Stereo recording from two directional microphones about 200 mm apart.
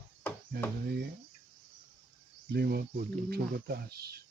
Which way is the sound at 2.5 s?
50° right (ahead or behind).